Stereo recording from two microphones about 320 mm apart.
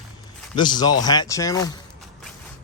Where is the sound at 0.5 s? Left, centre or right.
Centre.